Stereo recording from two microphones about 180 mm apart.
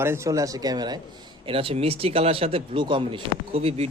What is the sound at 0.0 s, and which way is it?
Speech, 15° right (ahead or behind).